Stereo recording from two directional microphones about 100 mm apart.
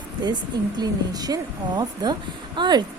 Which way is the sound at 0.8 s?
40° right (ahead or behind).